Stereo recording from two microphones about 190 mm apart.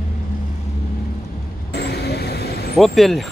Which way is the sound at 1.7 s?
60° left (ahead or behind).